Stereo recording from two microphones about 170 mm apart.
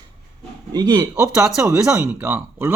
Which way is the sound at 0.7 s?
25° right (ahead or behind).